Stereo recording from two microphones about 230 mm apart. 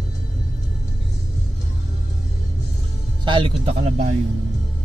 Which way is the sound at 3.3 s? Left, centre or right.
Right.